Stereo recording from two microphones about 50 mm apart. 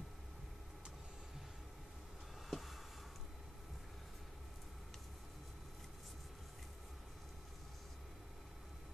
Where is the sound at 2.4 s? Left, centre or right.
Centre.